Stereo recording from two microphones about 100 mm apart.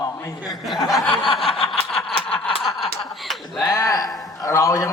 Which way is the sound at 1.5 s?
70° left (ahead or behind).